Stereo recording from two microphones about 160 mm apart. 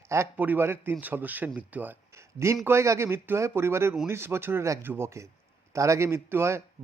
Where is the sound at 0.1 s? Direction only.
15° right (ahead or behind).